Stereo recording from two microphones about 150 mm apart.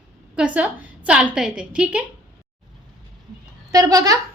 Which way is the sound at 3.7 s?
25° right (ahead or behind).